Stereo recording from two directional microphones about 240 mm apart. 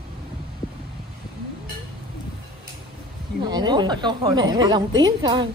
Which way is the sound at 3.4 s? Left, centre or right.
Centre.